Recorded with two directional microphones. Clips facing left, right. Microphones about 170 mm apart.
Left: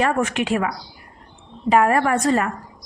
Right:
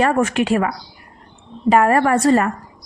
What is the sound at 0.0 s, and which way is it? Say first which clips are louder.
Speech: right 4 dB; 45° right (ahead or behind).